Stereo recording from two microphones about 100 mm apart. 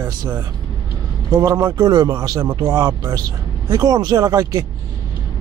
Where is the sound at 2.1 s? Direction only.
30° right (ahead or behind).